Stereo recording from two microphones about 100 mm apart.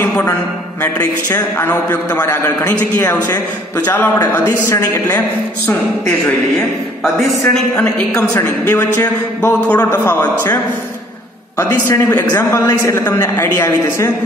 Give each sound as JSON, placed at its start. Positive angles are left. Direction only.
{"t": 0.0, "sound": "a sound", "side_deg": 20}
{"t": 1.9, "sound": "a man's voice", "side_deg": 30}
{"t": 3.8, "sound": "a man's voice", "side_deg": 20}
{"t": 7.4, "sound": "a woman's voice", "side_deg": 10}
{"t": 8.4, "sound": "a man's voice", "side_deg": 20}
{"t": 12.3, "sound": "a man's voice", "side_deg": 30}